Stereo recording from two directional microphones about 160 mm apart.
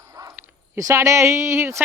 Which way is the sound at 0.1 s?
20° right (ahead or behind).